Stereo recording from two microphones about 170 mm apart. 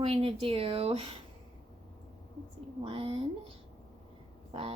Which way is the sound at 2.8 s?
35° right (ahead or behind).